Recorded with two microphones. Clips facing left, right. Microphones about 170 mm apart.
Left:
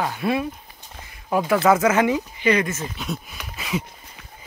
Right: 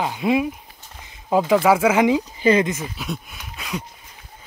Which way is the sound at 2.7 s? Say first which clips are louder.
Right 1 dB; 10° right (ahead or behind).